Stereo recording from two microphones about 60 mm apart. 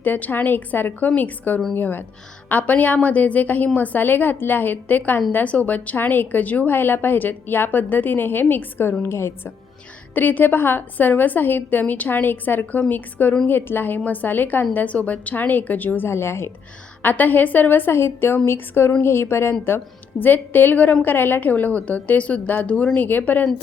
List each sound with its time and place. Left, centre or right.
0.0 s a woman's voice: left
10.2 s a woman's voice: left
16.0 s a woman's voice: left
17.0 s a woman's voice: left
20.2 s a woman's voice: left